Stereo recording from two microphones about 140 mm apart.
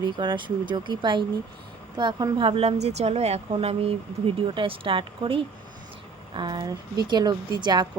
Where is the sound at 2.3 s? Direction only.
40° right (ahead or behind).